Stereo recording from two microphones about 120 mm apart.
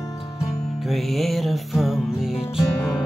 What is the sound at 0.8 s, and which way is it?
Music, centre (ahead or behind).